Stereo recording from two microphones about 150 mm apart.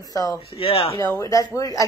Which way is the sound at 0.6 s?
40° left (ahead or behind).